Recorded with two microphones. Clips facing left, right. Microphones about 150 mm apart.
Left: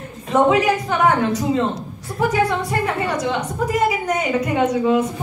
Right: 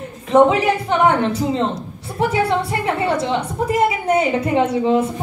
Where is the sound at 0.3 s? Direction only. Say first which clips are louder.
Right 2 dB; 30° right (ahead or behind).